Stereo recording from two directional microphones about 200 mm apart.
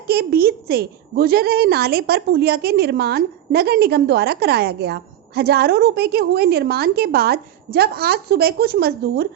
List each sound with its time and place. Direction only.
0.1 s a woman's voice: 50° right (ahead or behind)